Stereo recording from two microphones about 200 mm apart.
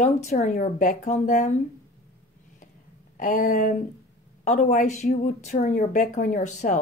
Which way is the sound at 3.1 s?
40° left (ahead or behind).